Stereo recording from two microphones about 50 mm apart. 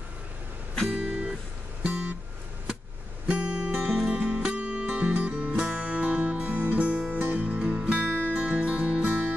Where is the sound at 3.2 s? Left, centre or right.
Right.